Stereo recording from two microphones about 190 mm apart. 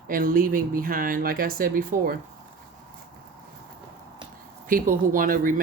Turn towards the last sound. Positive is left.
turn(degrees=-45)  # may be behind; listen again after turning